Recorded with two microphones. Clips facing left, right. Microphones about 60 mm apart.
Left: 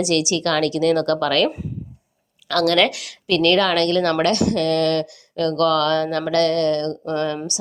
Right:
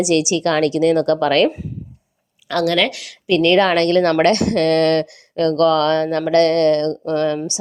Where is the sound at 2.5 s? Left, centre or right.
Centre.